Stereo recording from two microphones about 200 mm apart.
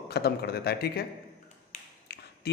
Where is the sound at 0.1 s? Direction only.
55° left (ahead or behind).